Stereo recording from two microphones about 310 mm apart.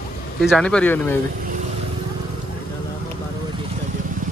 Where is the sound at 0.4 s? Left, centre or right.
Centre.